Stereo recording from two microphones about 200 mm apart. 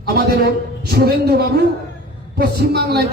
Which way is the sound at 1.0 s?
50° right (ahead or behind).